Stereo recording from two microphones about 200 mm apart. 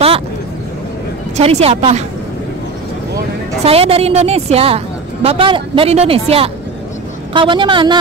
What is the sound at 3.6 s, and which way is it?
Speech, 30° right (ahead or behind).